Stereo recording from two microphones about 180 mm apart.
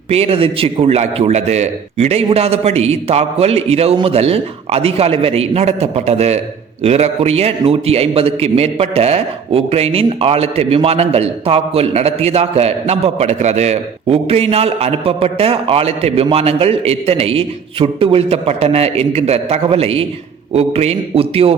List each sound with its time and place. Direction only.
0.1 s a man's voice: 35° right (ahead or behind)